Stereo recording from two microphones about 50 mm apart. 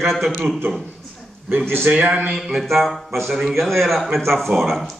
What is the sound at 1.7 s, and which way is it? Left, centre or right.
Speech, right.